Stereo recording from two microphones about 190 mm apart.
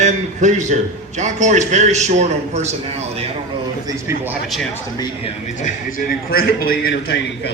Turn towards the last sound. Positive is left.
turn(degrees=60)  # may be behind; listen again after turning